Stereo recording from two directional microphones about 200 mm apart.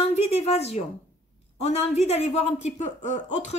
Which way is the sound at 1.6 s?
30° left (ahead or behind).